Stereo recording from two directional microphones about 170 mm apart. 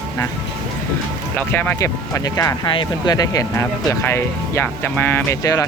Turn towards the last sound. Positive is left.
turn(degrees=20)  # may be behind; listen again after turning